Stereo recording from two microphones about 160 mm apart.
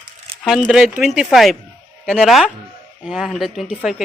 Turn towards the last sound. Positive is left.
turn(degrees=0)  # may be behind; listen again after turning